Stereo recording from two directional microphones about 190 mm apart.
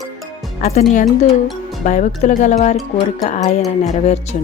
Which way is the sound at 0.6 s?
35° left (ahead or behind).